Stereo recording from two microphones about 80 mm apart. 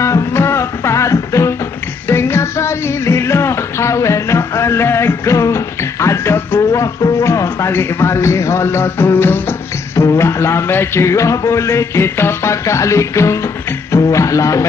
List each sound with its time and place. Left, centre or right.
0.0 s music: left